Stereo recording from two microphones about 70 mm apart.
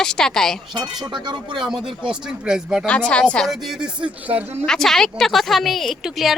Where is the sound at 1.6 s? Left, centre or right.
Centre.